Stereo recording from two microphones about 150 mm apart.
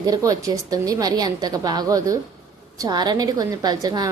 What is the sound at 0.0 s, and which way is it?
A woman's voice, 25° right (ahead or behind).